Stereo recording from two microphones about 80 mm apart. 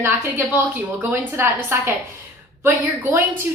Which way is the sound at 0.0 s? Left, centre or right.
Right.